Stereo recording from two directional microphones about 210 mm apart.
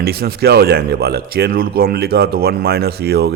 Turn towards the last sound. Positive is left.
turn(degrees=-50)  # may be behind; listen again after turning